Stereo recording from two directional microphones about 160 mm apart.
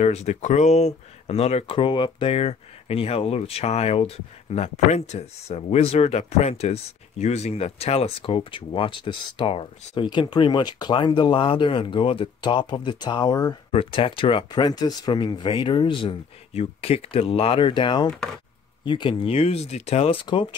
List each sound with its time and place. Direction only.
0.0 s speech: 45° left (ahead or behind); by 13.6 s 25° left (ahead or behind)
13.7 s speech: 35° left (ahead or behind)